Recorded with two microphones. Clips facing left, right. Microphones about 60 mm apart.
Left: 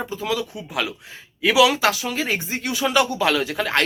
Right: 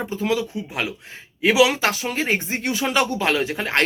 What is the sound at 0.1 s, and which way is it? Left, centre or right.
Speech, right.